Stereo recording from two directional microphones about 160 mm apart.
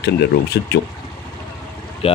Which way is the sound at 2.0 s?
35° left (ahead or behind).